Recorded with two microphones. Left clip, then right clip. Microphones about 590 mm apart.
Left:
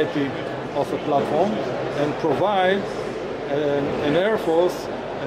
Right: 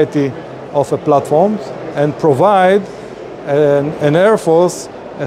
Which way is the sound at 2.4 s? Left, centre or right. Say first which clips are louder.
Right 10 dB; right.